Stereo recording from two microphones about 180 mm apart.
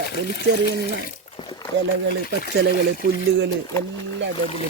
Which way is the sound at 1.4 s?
25° left (ahead or behind).